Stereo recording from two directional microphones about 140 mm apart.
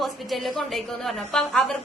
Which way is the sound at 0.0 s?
Centre (ahead or behind).